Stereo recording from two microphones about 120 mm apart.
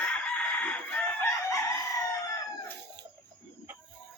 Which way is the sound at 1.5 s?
25° left (ahead or behind).